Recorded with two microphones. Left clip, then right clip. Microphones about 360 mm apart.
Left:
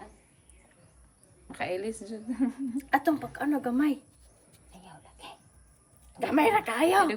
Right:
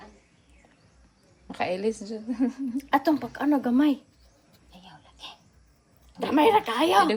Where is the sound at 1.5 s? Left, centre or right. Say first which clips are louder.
Right 5 dB; centre.